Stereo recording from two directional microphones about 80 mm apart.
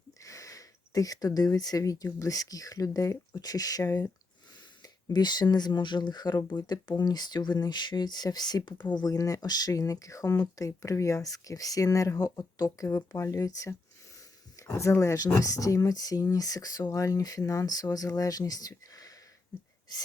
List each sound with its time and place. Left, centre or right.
0.2 s speech: left
4.8 s speech: left